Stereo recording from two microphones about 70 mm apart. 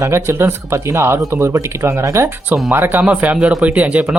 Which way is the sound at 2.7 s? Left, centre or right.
Right.